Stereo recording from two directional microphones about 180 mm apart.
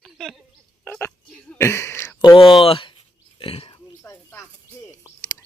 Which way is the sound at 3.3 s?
30° left (ahead or behind).